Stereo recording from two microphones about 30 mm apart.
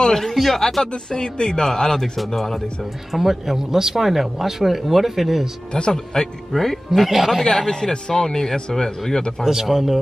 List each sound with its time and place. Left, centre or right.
0.0 s speech: centre
0.9 s speech: left; by 2.6 s centre
3.1 s speech: centre
5.7 s speech: left
6.5 s speech: centre
6.9 s speech: centre
7.5 s speech: centre
7.9 s speech: left
9.4 s speech: centre